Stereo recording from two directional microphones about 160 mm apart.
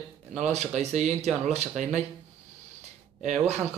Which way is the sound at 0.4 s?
45° right (ahead or behind).